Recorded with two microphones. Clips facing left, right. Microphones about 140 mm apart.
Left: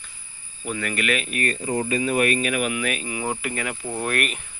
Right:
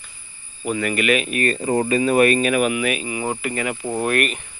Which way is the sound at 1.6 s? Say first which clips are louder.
Right 5 dB; 40° right (ahead or behind).